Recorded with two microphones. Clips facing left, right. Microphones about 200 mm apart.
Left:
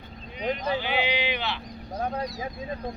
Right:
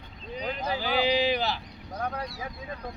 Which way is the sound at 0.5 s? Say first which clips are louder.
Left 1 dB; 35° right (ahead or behind).